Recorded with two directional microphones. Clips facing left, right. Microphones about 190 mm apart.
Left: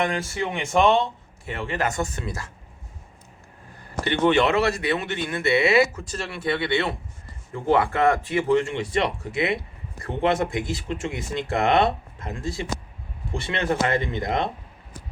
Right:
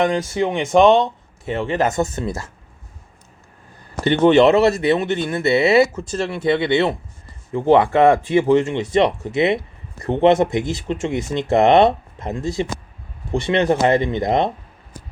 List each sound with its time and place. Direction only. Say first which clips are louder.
0.0 s speech: right 7 dB; 20° right (ahead or behind)
4.0 s speech: right 7 dB; 35° right (ahead or behind)